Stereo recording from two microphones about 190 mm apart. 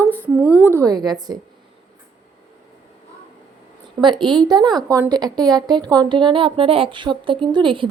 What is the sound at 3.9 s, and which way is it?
A woman's voice, 25° right (ahead or behind).